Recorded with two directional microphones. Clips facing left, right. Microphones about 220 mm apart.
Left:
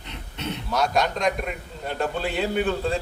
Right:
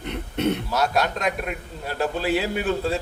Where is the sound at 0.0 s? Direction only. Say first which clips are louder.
Right 10 dB; 55° right (ahead or behind).